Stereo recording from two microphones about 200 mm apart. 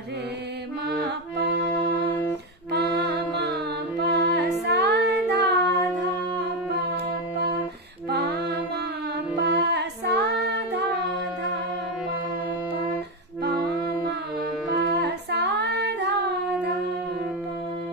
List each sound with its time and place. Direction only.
4.0 s child singing: 60° right (ahead or behind)
8.1 s music: 55° right (ahead or behind)
14.8 s female singing: 55° right (ahead or behind)